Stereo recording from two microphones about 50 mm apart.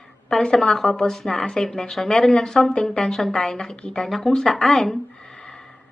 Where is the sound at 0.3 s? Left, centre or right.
Centre.